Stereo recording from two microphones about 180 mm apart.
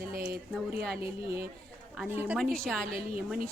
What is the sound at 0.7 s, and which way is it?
Speech, 5° right (ahead or behind).